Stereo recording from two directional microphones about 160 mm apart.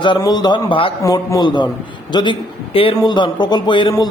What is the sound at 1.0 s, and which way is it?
A man's voice, 20° left (ahead or behind).